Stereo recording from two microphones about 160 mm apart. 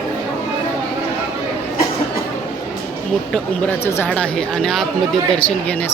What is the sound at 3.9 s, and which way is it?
Speech, 10° left (ahead or behind).